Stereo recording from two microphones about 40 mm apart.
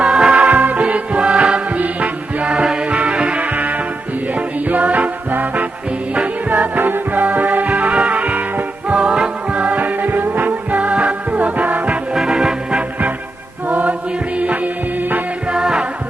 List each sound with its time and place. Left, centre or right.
0.0 s music: right
0.5 s music: right
4.7 s music: right
9.6 s music: right
12.1 s music: centre
13.7 s chant: right
14.3 s music: right
15.5 s music: centre